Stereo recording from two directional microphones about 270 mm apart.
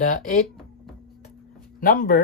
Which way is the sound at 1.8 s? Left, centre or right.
Left.